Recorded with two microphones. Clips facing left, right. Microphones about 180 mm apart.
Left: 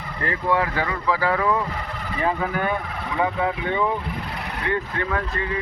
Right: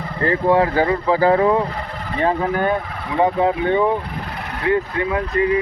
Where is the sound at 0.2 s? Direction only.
30° right (ahead or behind).